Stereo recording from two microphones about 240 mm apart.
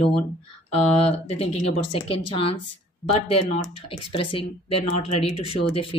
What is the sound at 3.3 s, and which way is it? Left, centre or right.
Speech, left.